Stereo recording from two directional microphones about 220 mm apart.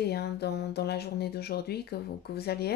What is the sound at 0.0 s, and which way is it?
Speech, 50° left (ahead or behind).